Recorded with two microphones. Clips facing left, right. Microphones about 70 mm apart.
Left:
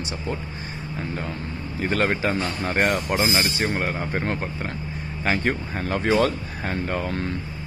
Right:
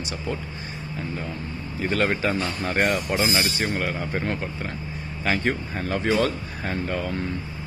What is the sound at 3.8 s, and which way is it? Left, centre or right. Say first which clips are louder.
Speech: left 1 dB; left.